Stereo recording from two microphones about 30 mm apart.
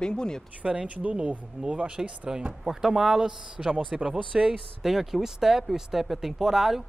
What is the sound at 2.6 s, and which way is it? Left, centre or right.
Speech, centre.